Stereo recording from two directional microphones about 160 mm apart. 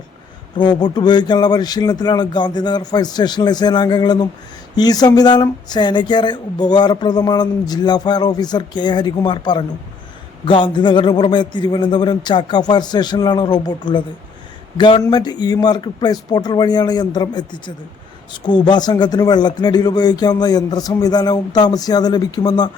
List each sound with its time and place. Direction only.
0.5 s speech: 30° left (ahead or behind)